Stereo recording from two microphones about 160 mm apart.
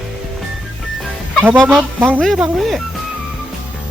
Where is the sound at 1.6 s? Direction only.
Centre (ahead or behind).